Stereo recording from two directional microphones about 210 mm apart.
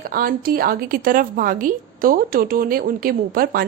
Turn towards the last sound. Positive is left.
turn(degrees=-45)  # may be behind; listen again after turning